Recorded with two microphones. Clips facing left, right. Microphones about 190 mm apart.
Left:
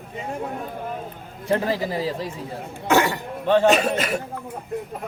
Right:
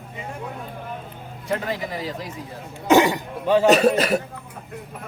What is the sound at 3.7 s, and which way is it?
Speech, 40° right (ahead or behind).